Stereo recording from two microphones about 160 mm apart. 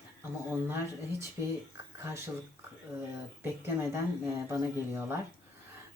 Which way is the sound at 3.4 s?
15° right (ahead or behind).